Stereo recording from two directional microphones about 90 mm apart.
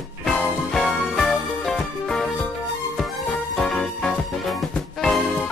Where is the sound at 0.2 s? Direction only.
5° left (ahead or behind).